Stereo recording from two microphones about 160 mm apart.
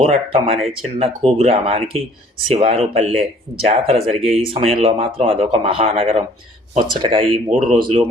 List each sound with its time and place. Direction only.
0.0 s speech: 35° right (ahead or behind)